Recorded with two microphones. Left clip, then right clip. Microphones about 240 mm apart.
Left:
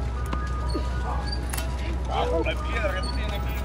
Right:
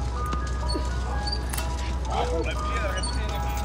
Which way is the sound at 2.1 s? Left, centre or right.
Left.